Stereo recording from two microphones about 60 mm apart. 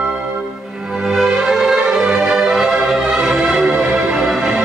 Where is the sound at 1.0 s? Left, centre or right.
Centre.